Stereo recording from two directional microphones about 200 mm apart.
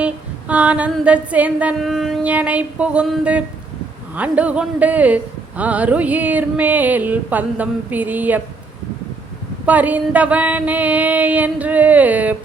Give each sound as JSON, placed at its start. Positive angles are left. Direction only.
{"t": 0.0, "sound": "speech", "side_deg": -5}
{"t": 9.6, "sound": "speech", "side_deg": -10}